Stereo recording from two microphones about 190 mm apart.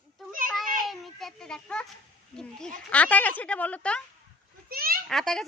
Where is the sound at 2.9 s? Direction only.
10° left (ahead or behind).